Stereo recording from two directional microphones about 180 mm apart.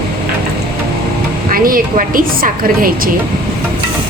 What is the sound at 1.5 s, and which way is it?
A woman's voice, 50° right (ahead or behind).